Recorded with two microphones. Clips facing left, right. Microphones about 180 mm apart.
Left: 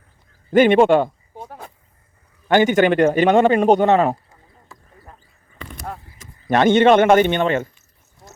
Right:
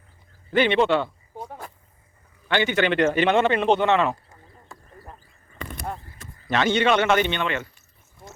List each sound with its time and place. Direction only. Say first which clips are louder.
0.5 s a man's voice: left 7 dB; 45° left (ahead or behind)
1.3 s a sound: even; centre (ahead or behind)
2.5 s a man's voice: left 7 dB; 45° left (ahead or behind)
6.5 s a man's voice: left 8 dB; 50° left (ahead or behind)